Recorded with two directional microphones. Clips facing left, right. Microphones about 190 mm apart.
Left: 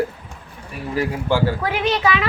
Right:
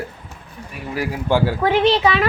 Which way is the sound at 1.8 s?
30° right (ahead or behind).